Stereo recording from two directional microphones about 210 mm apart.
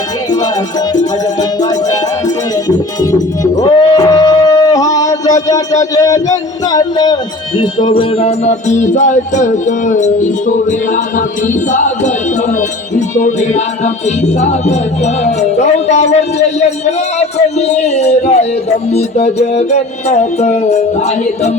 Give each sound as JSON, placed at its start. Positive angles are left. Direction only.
{"t": 0.9, "sound": "music", "side_deg": 15}
{"t": 5.8, "sound": "speech", "side_deg": 15}
{"t": 7.9, "sound": "music", "side_deg": 30}
{"t": 17.2, "sound": "a sound", "side_deg": 30}
{"t": 18.9, "sound": "music", "side_deg": 30}